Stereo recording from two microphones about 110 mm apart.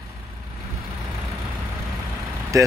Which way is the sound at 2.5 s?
30° right (ahead or behind).